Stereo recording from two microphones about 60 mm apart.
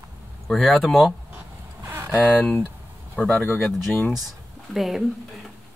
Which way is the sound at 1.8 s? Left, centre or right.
Right.